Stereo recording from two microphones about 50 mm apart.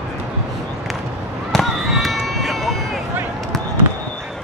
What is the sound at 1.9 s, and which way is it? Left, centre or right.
Run, centre.